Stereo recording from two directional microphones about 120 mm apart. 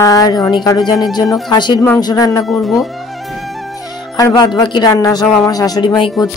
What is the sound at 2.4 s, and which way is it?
Speech, centre (ahead or behind).